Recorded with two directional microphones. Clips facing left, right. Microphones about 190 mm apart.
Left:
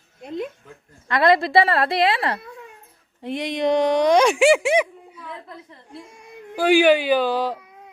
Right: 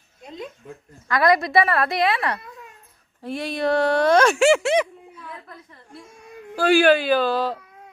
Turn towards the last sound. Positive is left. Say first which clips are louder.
# even
turn(degrees=15)  # may be behind; listen again after turning